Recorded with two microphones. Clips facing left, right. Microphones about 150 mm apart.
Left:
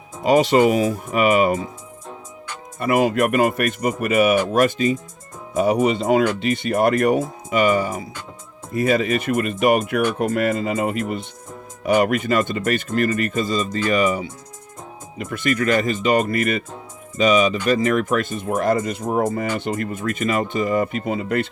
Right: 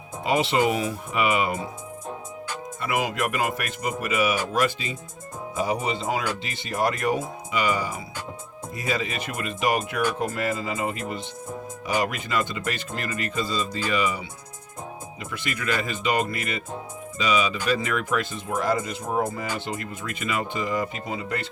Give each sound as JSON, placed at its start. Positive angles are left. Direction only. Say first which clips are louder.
{"t": 0.2, "sound": "speech", "louder": "left 7 dB", "side_deg": 45}
{"t": 2.8, "sound": "speech", "louder": "left 9 dB", "side_deg": 50}